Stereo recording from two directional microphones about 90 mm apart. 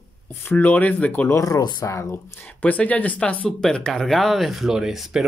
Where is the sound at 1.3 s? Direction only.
40° left (ahead or behind).